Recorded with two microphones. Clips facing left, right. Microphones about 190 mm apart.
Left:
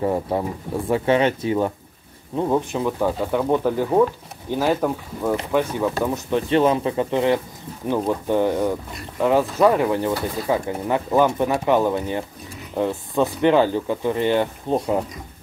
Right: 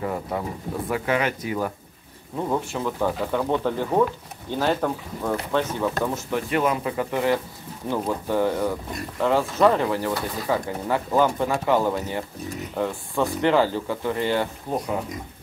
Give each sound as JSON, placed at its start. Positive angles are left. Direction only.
{"t": 0.0, "sound": "speech", "side_deg": 30}
{"t": 6.5, "sound": "speech", "side_deg": 30}